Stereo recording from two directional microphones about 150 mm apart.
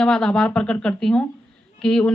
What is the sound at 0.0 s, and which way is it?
A woman's voice, 5° left (ahead or behind).